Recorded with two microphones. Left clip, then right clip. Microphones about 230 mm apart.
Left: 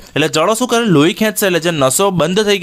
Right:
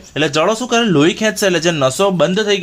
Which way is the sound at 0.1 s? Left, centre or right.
Left.